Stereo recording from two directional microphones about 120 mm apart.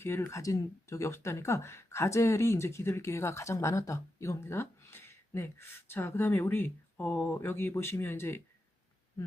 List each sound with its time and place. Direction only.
0.0 s speech: 20° left (ahead or behind)